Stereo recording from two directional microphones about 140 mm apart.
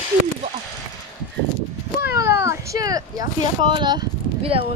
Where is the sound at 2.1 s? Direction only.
20° right (ahead or behind); by 4.7 s 40° right (ahead or behind).